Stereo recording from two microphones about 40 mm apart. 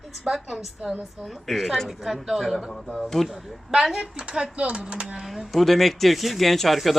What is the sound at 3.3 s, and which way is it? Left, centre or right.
Speech, centre.